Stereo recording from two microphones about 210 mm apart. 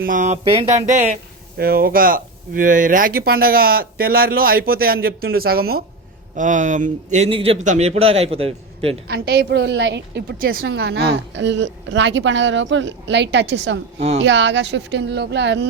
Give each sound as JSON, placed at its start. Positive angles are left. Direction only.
{"t": 0.0, "sound": "a man's voice", "side_deg": -40}
{"t": 1.5, "sound": "a man's voice", "side_deg": -45}
{"t": 9.0, "sound": "speech", "side_deg": -50}
{"t": 10.6, "sound": "a woman's voice", "side_deg": -55}